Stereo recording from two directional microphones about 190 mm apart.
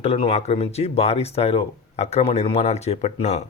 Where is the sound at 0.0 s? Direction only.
30° left (ahead or behind).